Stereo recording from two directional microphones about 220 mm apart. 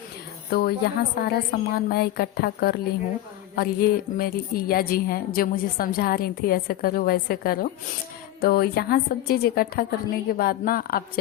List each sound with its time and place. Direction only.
0.5 s a woman's voice: 45° left (ahead or behind)